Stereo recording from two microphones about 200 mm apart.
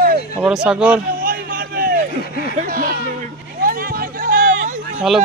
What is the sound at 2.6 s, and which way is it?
Speech, 45° right (ahead or behind).